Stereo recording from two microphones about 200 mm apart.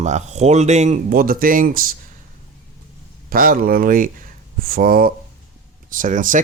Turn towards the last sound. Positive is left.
turn(degrees=-40)  # may be behind; listen again after turning